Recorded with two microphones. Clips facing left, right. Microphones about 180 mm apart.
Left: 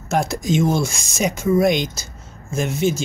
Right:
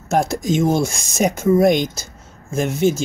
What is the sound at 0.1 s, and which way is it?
Speech, 50° right (ahead or behind).